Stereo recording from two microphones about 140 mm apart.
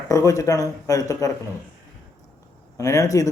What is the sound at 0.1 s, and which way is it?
Speech, 25° left (ahead or behind).